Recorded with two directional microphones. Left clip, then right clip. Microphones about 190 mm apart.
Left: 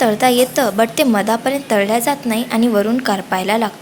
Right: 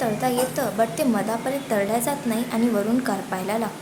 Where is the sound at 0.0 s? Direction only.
30° left (ahead or behind).